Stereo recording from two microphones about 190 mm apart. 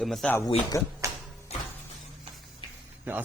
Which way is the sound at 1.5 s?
35° left (ahead or behind).